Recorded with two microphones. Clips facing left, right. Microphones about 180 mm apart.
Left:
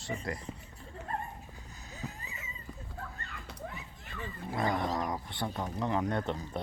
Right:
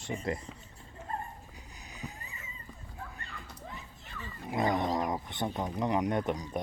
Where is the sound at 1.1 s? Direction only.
70° left (ahead or behind).